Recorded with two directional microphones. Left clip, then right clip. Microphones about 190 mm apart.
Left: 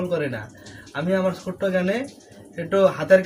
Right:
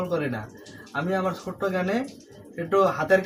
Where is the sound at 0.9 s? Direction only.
15° right (ahead or behind).